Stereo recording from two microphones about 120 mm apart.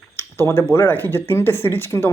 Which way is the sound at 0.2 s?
20° left (ahead or behind).